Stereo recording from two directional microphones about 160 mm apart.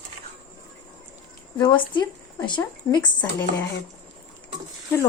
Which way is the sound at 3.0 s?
15° left (ahead or behind).